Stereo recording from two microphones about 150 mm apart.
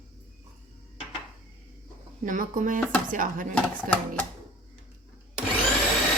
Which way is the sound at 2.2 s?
60° right (ahead or behind).